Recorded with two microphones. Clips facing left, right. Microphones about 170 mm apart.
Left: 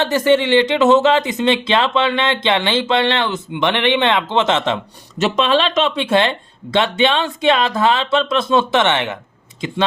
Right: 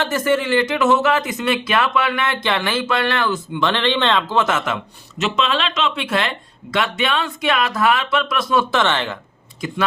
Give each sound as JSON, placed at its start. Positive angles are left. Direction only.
{"t": 0.5, "sound": "speech", "side_deg": 25}